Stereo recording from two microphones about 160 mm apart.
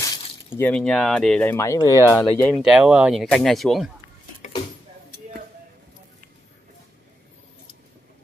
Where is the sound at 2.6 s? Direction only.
5° right (ahead or behind).